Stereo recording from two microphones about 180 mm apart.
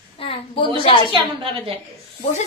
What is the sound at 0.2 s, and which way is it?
Speech, 30° left (ahead or behind).